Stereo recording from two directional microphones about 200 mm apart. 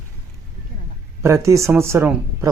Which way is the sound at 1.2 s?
15° right (ahead or behind).